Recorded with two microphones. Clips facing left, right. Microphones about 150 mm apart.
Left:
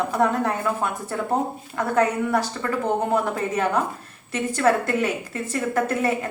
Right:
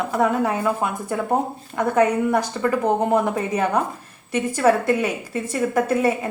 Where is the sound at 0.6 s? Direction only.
15° right (ahead or behind).